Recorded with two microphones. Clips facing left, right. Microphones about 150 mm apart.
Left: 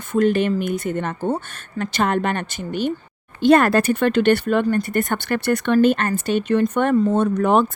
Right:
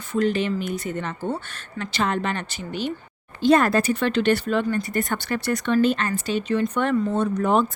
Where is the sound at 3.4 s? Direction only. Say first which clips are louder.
Left 3 dB; 65° left (ahead or behind).